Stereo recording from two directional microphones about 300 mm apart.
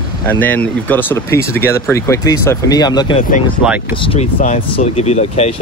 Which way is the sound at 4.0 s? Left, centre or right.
Centre.